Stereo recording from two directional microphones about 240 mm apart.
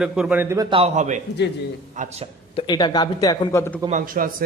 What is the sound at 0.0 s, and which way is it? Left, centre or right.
A man's voice, centre.